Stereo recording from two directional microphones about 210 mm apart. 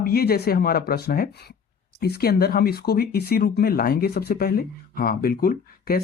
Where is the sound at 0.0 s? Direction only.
45° left (ahead or behind).